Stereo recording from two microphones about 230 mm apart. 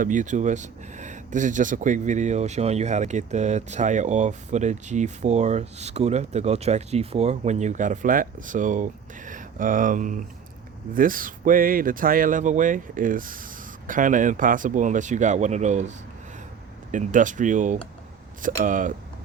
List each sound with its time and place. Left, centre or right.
0.0 s speech: right